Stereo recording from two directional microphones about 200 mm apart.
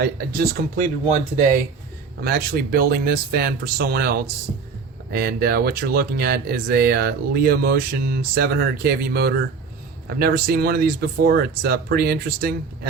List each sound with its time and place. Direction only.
0.0 s speech: 50° right (ahead or behind)
1.0 s speech: 35° right (ahead or behind)
2.2 s speech: 50° right (ahead or behind)